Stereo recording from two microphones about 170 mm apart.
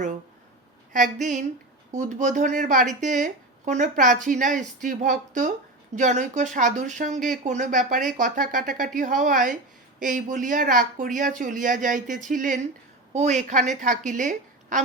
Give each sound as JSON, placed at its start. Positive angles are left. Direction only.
{"t": 0.9, "sound": "speech", "side_deg": -50}